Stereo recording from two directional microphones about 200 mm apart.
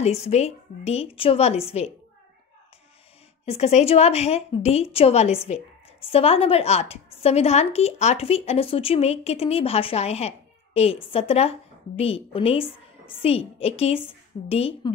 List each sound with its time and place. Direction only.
0.0 s a woman's voice: 30° left (ahead or behind)
3.4 s a woman's voice: 30° left (ahead or behind)